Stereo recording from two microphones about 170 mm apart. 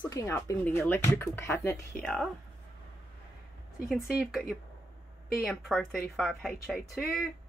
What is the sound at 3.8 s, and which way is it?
Speech, centre (ahead or behind).